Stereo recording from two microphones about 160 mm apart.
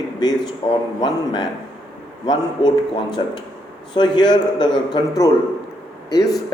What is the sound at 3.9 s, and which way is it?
Speech, 30° left (ahead or behind).